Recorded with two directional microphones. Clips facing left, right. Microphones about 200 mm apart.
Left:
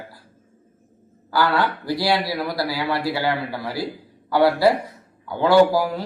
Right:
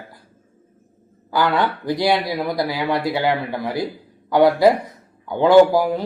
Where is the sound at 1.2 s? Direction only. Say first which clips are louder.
Right 1 dB; 20° right (ahead or behind).